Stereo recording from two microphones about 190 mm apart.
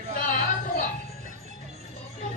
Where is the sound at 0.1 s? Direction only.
45° left (ahead or behind).